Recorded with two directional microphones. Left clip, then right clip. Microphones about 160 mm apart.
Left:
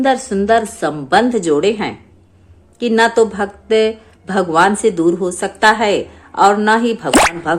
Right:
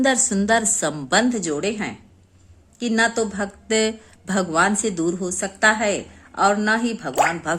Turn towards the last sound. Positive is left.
turn(degrees=-15)  # may be behind; listen again after turning